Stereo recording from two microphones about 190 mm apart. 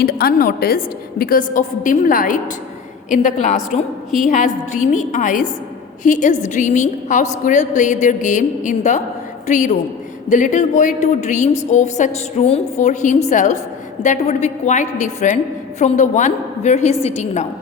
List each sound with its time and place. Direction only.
0.0 s a woman's voice: 50° left (ahead or behind); by 17.4 s 35° left (ahead or behind)